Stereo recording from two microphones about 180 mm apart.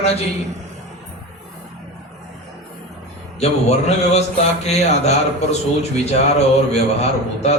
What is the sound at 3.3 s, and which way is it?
Speech, 35° left (ahead or behind).